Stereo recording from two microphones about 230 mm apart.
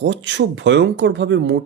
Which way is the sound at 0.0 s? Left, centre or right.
Right.